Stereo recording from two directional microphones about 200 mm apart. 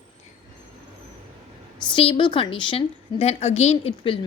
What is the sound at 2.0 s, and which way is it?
A woman's voice, 25° left (ahead or behind).